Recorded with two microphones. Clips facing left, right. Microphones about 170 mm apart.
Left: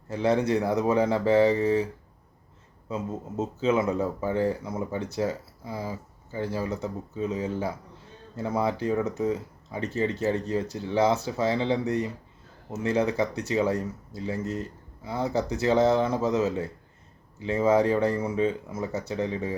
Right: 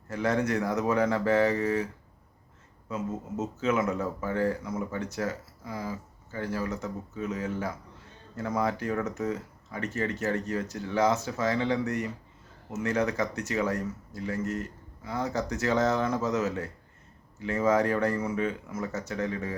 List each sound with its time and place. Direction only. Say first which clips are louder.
0.1 s speech: left 4 dB; 30° left (ahead or behind)
2.9 s speech: left 1 dB; 35° left (ahead or behind)
9.0 s speech: left 4 dB; 15° left (ahead or behind)
9.3 s speech: left 4 dB; 30° left (ahead or behind)